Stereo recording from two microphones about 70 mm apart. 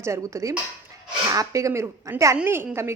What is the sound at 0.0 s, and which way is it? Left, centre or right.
A man's voice, right.